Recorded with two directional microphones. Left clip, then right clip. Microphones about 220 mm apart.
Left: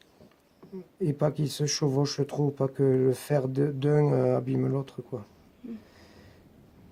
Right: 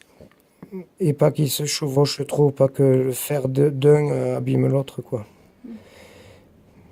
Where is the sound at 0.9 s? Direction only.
45° right (ahead or behind).